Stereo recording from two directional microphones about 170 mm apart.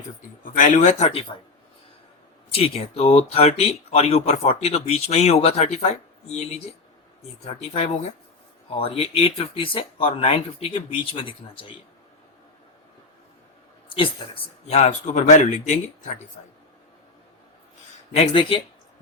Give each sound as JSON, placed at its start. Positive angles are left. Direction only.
{"t": 0.4, "sound": "speech", "side_deg": 50}
{"t": 2.5, "sound": "speech", "side_deg": 35}
{"t": 7.4, "sound": "speech", "side_deg": 40}
{"t": 13.9, "sound": "speech", "side_deg": 30}
{"t": 18.1, "sound": "speech", "side_deg": 35}